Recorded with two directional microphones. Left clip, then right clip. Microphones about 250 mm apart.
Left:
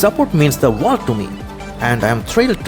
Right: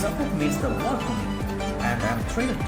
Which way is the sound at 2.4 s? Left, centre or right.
Left.